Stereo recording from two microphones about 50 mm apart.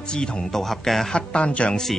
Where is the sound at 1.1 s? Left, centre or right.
Left.